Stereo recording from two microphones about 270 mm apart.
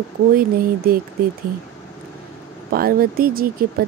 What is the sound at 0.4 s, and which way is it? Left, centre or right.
Speech, right.